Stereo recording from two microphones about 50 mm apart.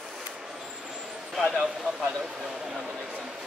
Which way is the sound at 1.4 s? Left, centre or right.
Centre.